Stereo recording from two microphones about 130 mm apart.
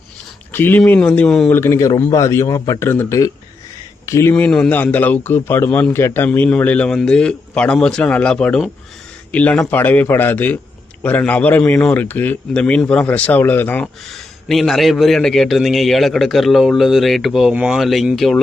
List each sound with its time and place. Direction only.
0.5 s speech: 15° left (ahead or behind)
1.5 s speech: 20° left (ahead or behind)
14.1 s a man's voice: centre (ahead or behind)